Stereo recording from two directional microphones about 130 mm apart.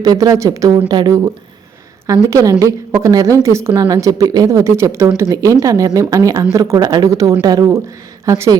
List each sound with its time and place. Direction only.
0.0 s speech: 30° right (ahead or behind)
2.3 s speech: 25° right (ahead or behind)